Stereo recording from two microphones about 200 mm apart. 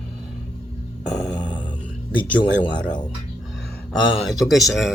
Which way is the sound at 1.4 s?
20° left (ahead or behind).